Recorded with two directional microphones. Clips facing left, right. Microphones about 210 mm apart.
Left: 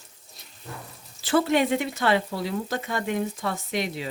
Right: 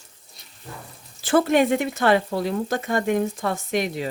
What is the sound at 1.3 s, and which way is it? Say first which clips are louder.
Speech: right 3 dB; 50° right (ahead or behind).